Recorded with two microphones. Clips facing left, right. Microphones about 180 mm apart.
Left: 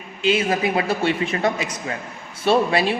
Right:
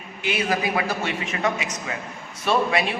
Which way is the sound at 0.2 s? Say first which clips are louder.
Left 5 dB; 25° left (ahead or behind).